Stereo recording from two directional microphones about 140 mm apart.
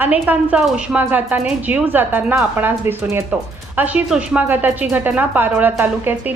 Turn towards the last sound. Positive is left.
turn(degrees=-15)  # may be behind; listen again after turning